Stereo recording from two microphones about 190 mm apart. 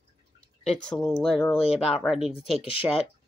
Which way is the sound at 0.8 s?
Centre (ahead or behind).